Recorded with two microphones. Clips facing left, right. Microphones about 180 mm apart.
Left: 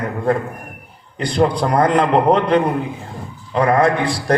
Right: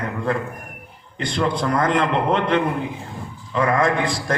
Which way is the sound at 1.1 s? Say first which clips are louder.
Left 5 dB; 35° left (ahead or behind).